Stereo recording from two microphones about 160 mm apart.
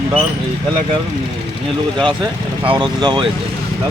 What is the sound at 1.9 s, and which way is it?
Speech, 30° right (ahead or behind).